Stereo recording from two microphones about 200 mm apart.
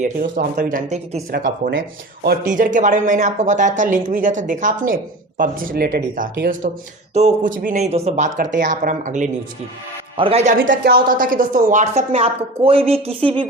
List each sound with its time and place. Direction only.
0.0 s speech: 45° right (ahead or behind)
1.3 s a woman's voice: 45° right (ahead or behind); by 10.5 s 30° right (ahead or behind)
10.7 s a woman's voice: 50° right (ahead or behind); by 13.5 s 25° right (ahead or behind)